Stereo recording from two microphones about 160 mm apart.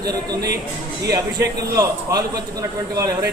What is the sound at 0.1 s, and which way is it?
A man's voice, 25° right (ahead or behind).